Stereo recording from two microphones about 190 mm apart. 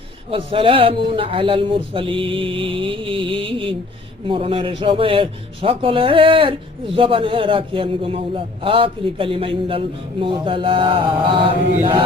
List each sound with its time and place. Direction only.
0.3 s a man's voice: 30° right (ahead or behind)